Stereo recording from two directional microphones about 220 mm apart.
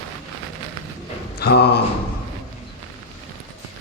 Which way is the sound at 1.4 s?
45° left (ahead or behind).